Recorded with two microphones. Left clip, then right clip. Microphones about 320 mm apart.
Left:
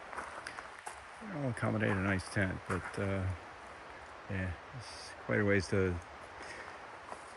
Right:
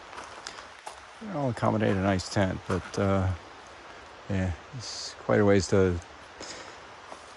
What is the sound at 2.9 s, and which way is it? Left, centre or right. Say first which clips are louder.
Speech: right 14 dB; right.